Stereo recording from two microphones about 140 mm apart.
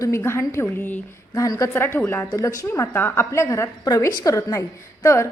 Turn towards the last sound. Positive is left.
turn(degrees=20)  # may be behind; listen again after turning